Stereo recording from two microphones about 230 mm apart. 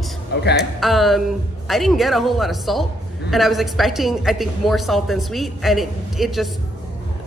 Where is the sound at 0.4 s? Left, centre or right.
Left.